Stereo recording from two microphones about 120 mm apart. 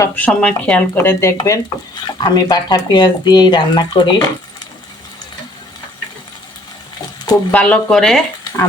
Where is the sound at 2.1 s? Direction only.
35° left (ahead or behind).